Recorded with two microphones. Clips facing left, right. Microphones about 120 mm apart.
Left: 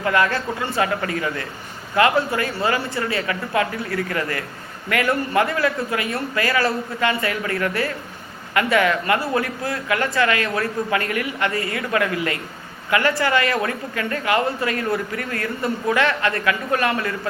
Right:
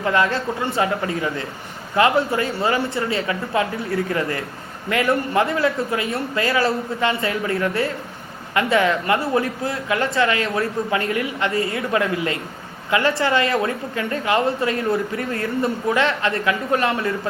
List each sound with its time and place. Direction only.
0.0 s a woman's voice: 20° right (ahead or behind)